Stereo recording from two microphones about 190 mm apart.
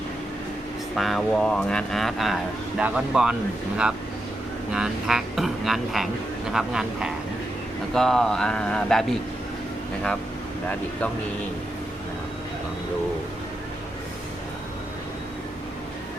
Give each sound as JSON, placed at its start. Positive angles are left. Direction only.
{"t": 0.9, "sound": "speech", "side_deg": 0}
{"t": 4.7, "sound": "speech", "side_deg": -5}